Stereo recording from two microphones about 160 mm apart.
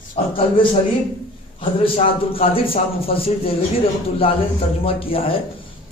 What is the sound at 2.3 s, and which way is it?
A man's voice, 35° left (ahead or behind).